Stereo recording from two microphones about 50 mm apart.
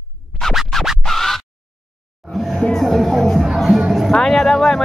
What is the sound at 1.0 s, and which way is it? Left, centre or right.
Scratch, centre.